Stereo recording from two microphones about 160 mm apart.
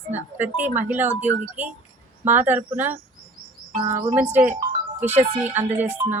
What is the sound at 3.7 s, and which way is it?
Insect, 55° right (ahead or behind).